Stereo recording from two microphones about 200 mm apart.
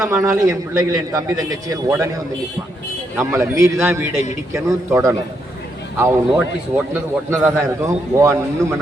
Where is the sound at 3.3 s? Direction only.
15° right (ahead or behind).